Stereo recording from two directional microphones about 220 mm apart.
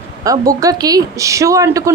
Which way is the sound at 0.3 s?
15° right (ahead or behind).